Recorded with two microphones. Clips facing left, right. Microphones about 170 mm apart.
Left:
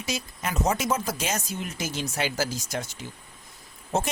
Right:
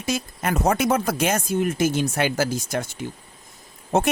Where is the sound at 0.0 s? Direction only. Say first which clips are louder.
Right 6 dB; 55° right (ahead or behind).